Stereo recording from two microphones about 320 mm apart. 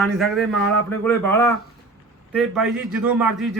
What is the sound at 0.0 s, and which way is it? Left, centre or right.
A man's voice, centre.